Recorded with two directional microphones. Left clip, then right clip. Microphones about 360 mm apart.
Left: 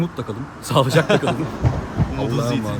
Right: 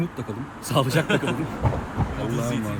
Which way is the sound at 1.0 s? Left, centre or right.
Left.